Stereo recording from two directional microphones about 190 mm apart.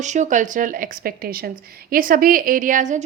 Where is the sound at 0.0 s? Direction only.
40° right (ahead or behind).